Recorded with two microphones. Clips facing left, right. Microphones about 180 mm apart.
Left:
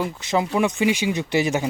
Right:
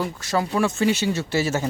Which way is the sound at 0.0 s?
20° left (ahead or behind).